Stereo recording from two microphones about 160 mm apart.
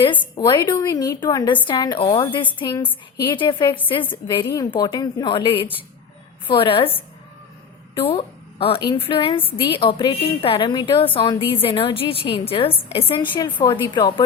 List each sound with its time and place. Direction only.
0.3 s a woman's voice: 25° left (ahead or behind)
2.7 s a woman's voice: 10° left (ahead or behind)
3.3 s a woman's voice: 30° left (ahead or behind)
8.6 s a woman's voice: 30° left (ahead or behind)